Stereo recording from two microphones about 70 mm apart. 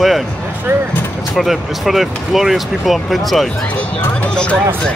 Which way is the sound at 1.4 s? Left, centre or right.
Centre.